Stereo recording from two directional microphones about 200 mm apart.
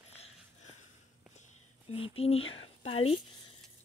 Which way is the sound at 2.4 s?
80° left.